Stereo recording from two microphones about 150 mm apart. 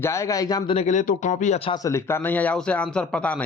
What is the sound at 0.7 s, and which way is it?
Speech, 50° left (ahead or behind).